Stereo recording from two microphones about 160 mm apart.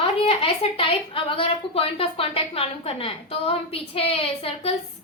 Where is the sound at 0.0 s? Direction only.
35° left (ahead or behind).